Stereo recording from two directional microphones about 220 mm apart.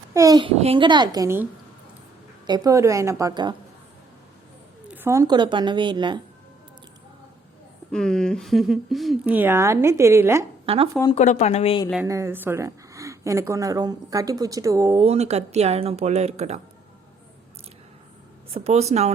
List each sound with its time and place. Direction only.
0.1 s speech: 15° right (ahead or behind)
2.5 s speech: 15° right (ahead or behind)
4.9 s speech: 10° right (ahead or behind)
7.9 s speech: 5° left (ahead or behind)
10.7 s speech: 25° right (ahead or behind)
11.1 s speech: 30° left (ahead or behind)
12.0 s speech: 15° right (ahead or behind)
15.0 s speech: 30° right (ahead or behind)
18.5 s speech: 30° right (ahead or behind)